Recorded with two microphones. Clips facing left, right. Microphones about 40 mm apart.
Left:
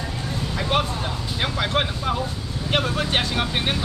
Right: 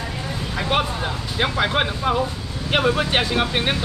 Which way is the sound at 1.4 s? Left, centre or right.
Centre.